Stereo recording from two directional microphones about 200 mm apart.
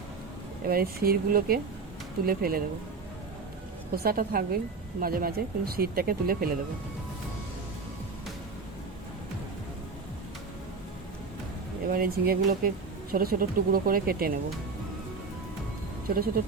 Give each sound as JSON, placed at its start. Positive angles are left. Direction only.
{"t": 0.7, "sound": "speech", "side_deg": -50}
{"t": 3.9, "sound": "speech", "side_deg": -50}
{"t": 11.9, "sound": "speech", "side_deg": -50}
{"t": 16.0, "sound": "speech", "side_deg": -45}